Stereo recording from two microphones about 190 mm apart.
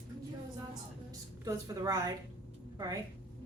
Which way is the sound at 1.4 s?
20° right (ahead or behind).